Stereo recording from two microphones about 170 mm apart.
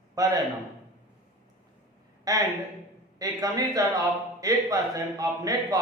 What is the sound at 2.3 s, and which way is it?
Speech, 20° right (ahead or behind).